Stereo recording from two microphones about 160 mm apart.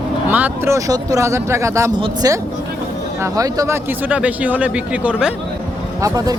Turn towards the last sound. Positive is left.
turn(degrees=-20)  # may be behind; listen again after turning